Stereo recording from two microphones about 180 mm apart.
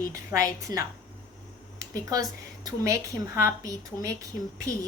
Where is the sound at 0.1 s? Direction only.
15° right (ahead or behind).